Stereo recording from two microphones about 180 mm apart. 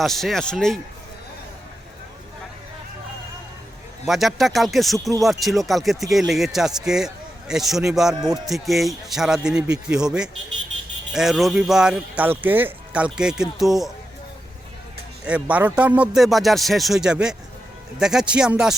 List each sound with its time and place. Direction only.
0.0 s speech: centre (ahead or behind)
4.0 s speech: centre (ahead or behind)
15.2 s speech: 5° right (ahead or behind)